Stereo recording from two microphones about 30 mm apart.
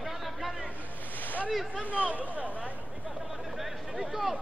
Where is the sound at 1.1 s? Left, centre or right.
Left.